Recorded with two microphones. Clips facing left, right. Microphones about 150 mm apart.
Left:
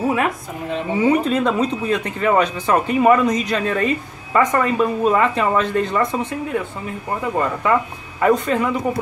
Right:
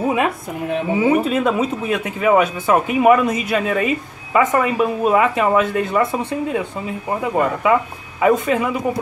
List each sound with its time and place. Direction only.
0.9 s speech: 5° right (ahead or behind)